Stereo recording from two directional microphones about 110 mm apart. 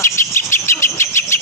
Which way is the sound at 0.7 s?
25° left (ahead or behind).